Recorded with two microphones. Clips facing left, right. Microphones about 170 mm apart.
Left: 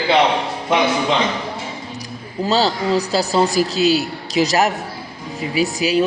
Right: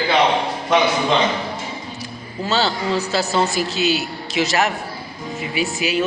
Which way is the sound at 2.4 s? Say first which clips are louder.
Left 3 dB; 35° left (ahead or behind).